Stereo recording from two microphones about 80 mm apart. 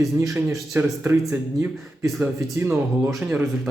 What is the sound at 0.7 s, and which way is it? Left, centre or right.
Speech, right.